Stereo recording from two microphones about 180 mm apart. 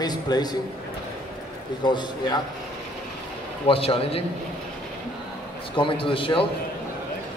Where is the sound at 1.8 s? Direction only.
25° left (ahead or behind).